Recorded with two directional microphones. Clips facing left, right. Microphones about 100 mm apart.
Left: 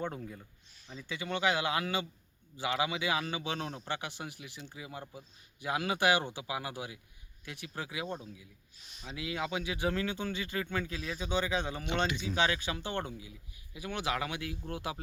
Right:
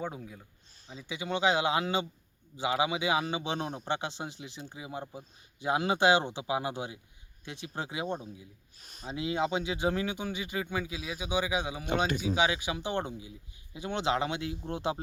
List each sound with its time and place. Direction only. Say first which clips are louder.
0.0 s speech: even; 5° right (ahead or behind)
0.9 s speech: right 3 dB; 15° right (ahead or behind)
8.8 s speech: right 5 dB; 45° right (ahead or behind)
9.1 s speech: right 5 dB; 25° right (ahead or behind)